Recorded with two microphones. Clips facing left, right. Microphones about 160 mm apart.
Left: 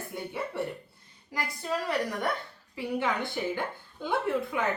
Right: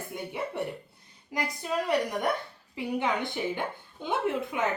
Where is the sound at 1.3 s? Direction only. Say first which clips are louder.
Right 2 dB; 15° right (ahead or behind).